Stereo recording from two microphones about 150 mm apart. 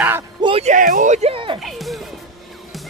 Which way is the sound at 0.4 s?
35° right (ahead or behind).